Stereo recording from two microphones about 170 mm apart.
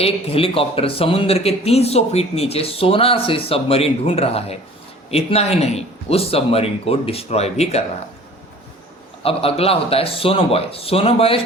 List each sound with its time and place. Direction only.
0.0 s speech: 35° left (ahead or behind)
9.2 s speech: 35° left (ahead or behind)